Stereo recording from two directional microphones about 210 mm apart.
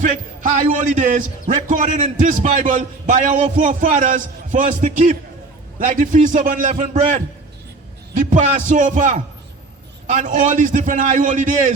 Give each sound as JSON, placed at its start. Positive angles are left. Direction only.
{"t": 0.7, "sound": "a man's voice", "side_deg": -40}